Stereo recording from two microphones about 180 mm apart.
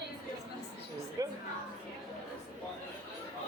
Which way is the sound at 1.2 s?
20° right (ahead or behind).